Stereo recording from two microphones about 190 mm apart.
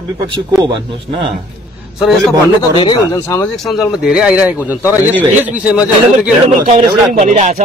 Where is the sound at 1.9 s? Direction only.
Centre (ahead or behind).